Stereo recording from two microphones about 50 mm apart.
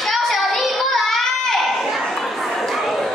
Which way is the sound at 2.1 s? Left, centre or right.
Centre.